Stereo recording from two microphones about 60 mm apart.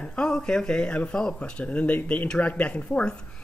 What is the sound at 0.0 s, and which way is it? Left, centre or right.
Speech, centre.